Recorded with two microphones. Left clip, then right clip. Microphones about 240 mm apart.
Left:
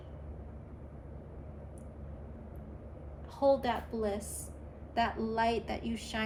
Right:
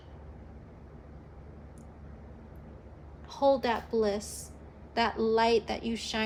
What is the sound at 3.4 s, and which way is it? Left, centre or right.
A woman's voice, right.